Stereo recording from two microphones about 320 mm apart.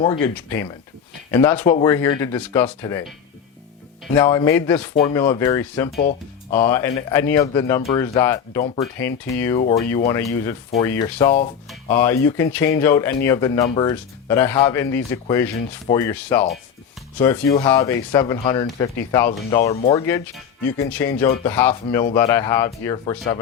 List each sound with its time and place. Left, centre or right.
0.0 s speech: centre
4.0 s speech: centre